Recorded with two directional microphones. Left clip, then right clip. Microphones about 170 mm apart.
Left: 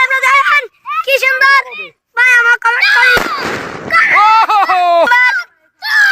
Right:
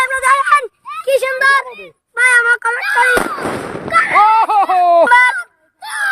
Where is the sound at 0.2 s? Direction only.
40° right (ahead or behind).